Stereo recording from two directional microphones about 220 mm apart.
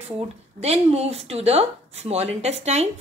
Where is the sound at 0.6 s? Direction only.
30° right (ahead or behind).